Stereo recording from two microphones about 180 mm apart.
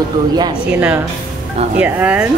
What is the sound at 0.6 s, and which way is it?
Speech, 5° right (ahead or behind).